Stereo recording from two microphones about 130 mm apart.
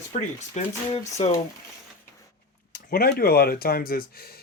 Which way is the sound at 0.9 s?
50° left (ahead or behind).